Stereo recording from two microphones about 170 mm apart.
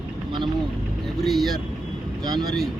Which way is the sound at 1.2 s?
Centre (ahead or behind).